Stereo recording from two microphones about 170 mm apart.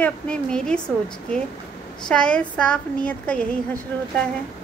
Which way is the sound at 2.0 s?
5° left (ahead or behind).